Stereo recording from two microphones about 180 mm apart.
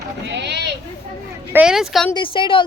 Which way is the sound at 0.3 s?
75° right (ahead or behind).